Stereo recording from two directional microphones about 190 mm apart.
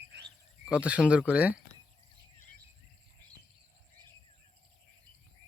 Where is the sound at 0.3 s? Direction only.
5° right (ahead or behind).